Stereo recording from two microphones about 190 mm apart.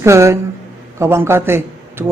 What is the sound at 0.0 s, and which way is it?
A man's voice, 15° right (ahead or behind).